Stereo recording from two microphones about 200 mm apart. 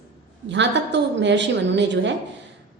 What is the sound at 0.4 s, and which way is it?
A woman's voice, 65° right (ahead or behind).